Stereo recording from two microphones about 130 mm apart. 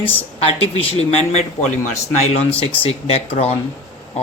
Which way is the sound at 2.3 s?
45° left (ahead or behind).